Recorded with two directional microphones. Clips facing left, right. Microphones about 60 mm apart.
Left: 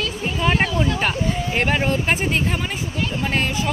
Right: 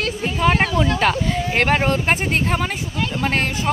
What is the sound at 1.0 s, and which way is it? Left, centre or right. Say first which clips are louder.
Speech: right 3 dB; right.